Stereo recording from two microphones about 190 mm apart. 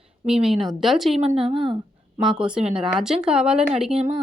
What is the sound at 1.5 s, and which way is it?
Speech, 25° right (ahead or behind).